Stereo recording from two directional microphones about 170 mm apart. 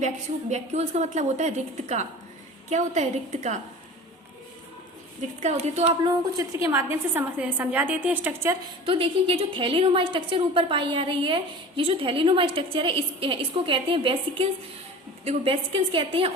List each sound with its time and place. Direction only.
0.5 s a woman's voice: 40° right (ahead or behind)
5.4 s a woman's voice: 40° right (ahead or behind)
6.3 s a woman's voice: 20° right (ahead or behind)
8.9 s a woman's voice: 30° right (ahead or behind)